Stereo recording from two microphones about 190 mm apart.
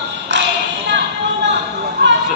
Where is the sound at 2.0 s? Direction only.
60° right (ahead or behind).